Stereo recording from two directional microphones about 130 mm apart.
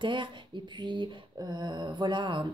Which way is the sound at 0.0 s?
40° right (ahead or behind).